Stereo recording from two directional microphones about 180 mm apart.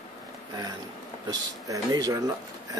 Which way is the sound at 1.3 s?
20° right (ahead or behind).